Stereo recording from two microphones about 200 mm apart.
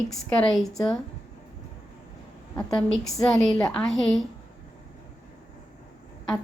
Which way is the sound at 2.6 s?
5° left (ahead or behind).